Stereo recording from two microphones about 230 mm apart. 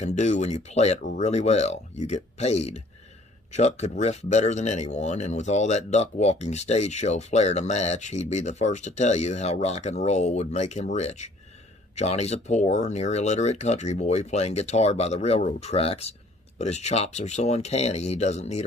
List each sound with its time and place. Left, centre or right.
0.0 s speech: left